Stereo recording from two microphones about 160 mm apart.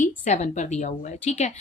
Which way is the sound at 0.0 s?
50° left (ahead or behind).